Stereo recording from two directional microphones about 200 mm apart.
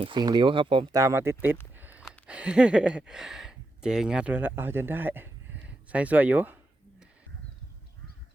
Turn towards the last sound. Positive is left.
turn(degrees=-10)  # may be behind; listen again after turning